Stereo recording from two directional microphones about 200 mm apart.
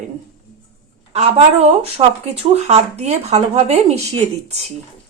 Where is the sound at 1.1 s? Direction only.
30° right (ahead or behind).